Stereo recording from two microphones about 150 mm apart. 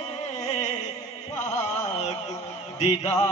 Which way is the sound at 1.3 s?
50° left (ahead or behind).